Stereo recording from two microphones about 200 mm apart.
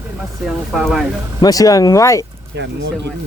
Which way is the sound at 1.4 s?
20° left (ahead or behind).